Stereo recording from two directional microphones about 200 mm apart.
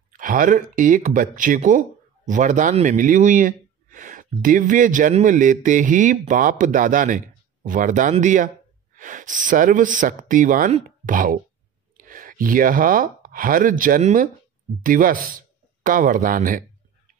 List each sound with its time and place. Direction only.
0.1 s speech: 40° right (ahead or behind)